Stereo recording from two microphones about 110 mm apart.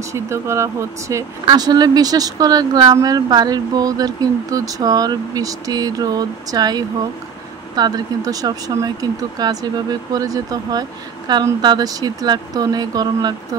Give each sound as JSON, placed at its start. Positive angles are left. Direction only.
{"t": 0.1, "sound": "speech", "side_deg": -25}
{"t": 1.5, "sound": "speech", "side_deg": -35}